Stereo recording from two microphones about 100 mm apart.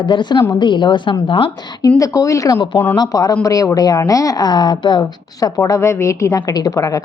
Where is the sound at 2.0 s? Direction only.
30° left (ahead or behind); by 5.5 s 50° left (ahead or behind).